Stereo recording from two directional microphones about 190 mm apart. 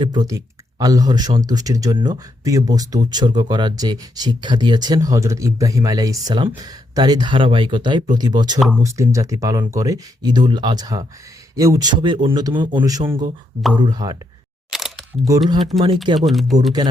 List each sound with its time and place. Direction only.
0.0 s speech: 20° right (ahead or behind)
8.5 s speech: centre (ahead or behind)
8.8 s speech: 15° right (ahead or behind)
14.7 s single-lens reflex camera: centre (ahead or behind)
15.7 s speech: 30° right (ahead or behind)
16.1 s speech: centre (ahead or behind)